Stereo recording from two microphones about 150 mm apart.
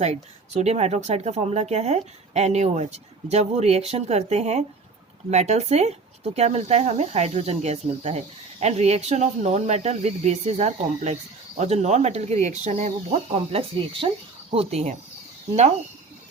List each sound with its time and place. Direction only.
0.0 s speech: 45° right (ahead or behind)
13.3 s speech: 40° right (ahead or behind)